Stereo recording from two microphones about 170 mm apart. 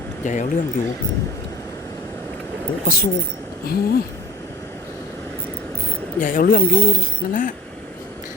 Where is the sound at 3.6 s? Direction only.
65° left (ahead or behind).